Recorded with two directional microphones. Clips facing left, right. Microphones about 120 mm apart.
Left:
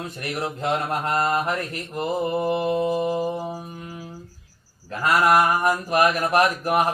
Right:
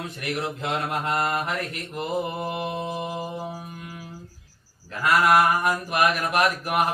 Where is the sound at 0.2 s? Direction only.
35° left (ahead or behind).